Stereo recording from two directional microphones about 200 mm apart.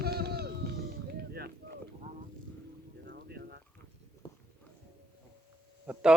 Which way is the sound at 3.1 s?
55° right (ahead or behind).